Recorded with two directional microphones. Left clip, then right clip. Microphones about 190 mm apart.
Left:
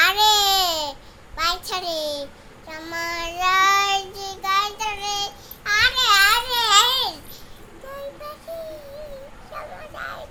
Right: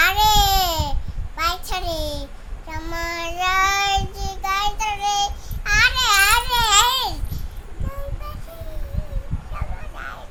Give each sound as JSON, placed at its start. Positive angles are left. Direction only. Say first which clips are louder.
{"t": 0.0, "sound": "baby cry", "louder": "even", "side_deg": 10}
{"t": 1.4, "sound": "a sound", "louder": "even", "side_deg": 10}
{"t": 2.6, "sound": "child singing", "louder": "even", "side_deg": 10}
{"t": 9.6, "sound": "honk", "louder": "left 3 dB", "side_deg": 20}